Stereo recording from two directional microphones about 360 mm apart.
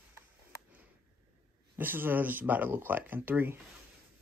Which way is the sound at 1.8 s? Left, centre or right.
Centre.